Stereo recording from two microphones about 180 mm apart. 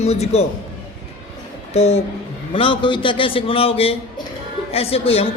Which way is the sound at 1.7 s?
35° left (ahead or behind).